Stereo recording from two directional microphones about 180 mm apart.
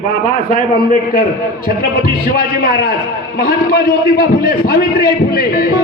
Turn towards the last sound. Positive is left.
turn(degrees=55)  # may be behind; listen again after turning